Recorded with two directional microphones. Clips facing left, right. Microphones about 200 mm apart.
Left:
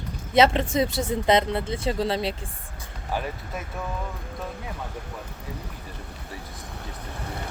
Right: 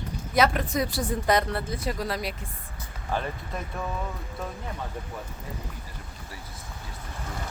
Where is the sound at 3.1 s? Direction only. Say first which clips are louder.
Even; 10° left (ahead or behind).